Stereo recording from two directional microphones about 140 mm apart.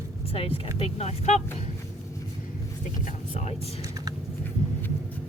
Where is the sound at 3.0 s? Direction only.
50° left (ahead or behind).